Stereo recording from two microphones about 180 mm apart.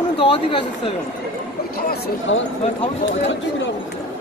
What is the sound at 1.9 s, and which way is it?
Speech, 90° left.